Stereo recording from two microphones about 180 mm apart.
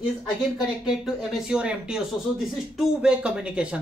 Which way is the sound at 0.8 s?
5° right (ahead or behind).